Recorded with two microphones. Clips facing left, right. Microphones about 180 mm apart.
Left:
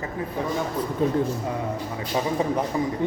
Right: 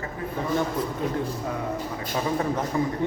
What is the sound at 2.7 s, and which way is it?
Speech, 15° left (ahead or behind).